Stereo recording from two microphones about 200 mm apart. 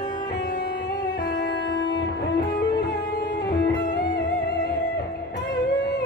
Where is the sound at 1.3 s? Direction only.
55° left (ahead or behind).